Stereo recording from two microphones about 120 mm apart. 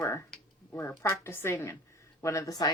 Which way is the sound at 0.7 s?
20° left (ahead or behind).